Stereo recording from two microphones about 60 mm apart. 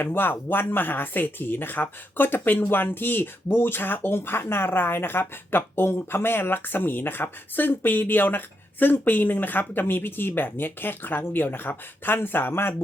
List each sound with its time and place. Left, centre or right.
0.0 s speech: left